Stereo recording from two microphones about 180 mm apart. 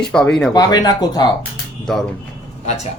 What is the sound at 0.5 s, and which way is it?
Speech, 20° left (ahead or behind).